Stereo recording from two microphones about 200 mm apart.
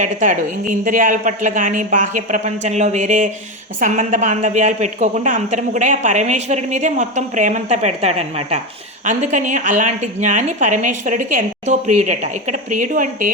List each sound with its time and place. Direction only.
0.0 s a woman's voice: 40° right (ahead or behind)